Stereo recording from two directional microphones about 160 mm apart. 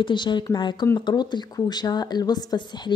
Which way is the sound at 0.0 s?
30° left (ahead or behind).